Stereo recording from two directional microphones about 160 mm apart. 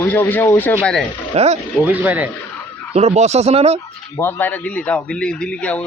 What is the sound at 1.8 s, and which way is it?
Speech, 10° right (ahead or behind).